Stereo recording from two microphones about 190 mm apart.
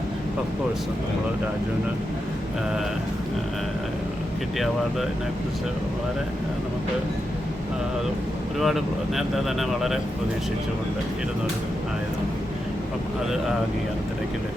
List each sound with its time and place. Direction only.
4.5 s speech: centre (ahead or behind)
8.5 s speech: centre (ahead or behind)